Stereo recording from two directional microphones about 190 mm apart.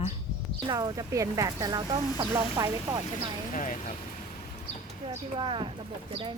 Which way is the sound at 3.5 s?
45° left (ahead or behind).